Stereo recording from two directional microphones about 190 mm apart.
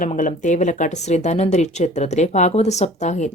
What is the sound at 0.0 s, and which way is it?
Speech, 40° left (ahead or behind).